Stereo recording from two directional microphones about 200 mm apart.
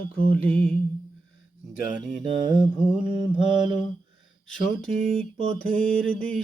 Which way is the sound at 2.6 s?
5° right (ahead or behind).